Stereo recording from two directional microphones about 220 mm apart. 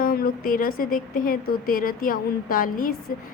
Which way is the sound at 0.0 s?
40° left (ahead or behind).